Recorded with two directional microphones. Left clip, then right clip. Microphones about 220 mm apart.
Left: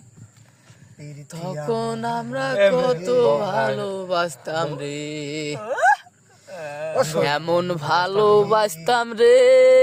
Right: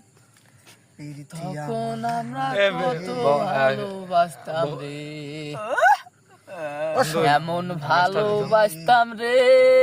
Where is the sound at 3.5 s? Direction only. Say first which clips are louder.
Right 1 dB; 20° right (ahead or behind).